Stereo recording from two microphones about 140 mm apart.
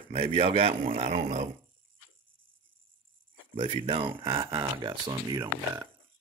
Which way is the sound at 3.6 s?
40° right (ahead or behind).